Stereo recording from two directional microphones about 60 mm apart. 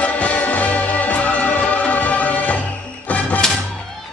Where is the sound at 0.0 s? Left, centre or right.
Left.